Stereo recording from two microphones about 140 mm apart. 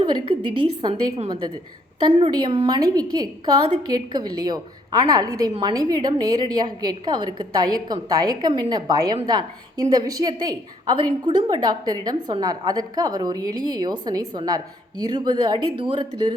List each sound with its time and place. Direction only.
0.0 s a woman's voice: 40° right (ahead or behind)